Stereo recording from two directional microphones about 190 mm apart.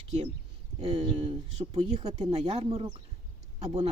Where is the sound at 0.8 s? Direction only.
35° right (ahead or behind).